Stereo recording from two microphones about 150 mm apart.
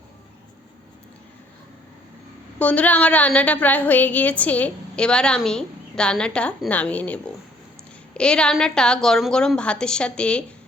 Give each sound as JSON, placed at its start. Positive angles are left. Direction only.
{"t": 2.6, "sound": "a woman's voice", "side_deg": 10}